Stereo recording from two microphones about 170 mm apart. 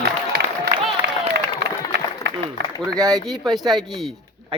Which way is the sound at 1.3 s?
80° right.